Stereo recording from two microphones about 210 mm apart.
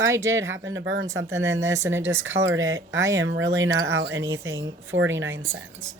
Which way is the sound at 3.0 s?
15° right (ahead or behind).